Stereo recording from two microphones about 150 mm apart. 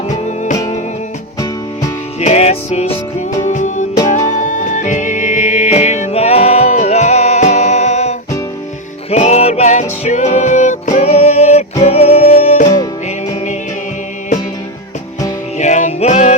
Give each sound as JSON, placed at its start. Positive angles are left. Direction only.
{"t": 2.2, "sound": "music", "side_deg": 45}
{"t": 3.5, "sound": "music", "side_deg": 55}
{"t": 12.6, "sound": "music", "side_deg": 25}
{"t": 15.5, "sound": "music", "side_deg": 50}